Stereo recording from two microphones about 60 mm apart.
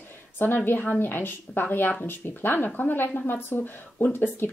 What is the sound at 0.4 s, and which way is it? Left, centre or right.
Speech, left.